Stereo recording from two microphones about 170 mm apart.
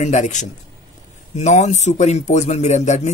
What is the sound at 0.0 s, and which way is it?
Speech, 45° left (ahead or behind).